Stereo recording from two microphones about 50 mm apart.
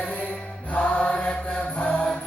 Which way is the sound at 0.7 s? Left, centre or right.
Left.